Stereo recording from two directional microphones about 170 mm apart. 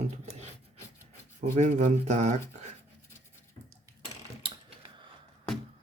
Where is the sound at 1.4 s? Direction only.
45° right (ahead or behind).